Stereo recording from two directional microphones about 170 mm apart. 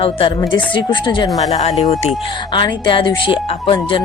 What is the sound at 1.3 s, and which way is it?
Speech, 40° left (ahead or behind).